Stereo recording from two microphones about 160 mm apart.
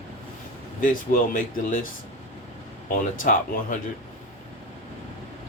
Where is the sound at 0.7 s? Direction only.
55° left (ahead or behind).